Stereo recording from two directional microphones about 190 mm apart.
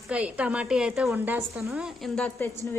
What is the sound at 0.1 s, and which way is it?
Speech, 5° right (ahead or behind).